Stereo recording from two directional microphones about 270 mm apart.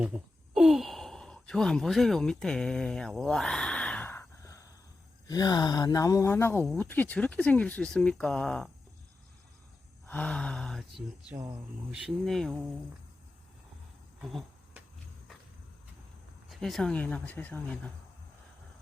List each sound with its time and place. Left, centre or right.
0.5 s sigh: centre
5.3 s speech: centre
10.1 s speech: centre
14.2 s a sound: centre
16.5 s speech: centre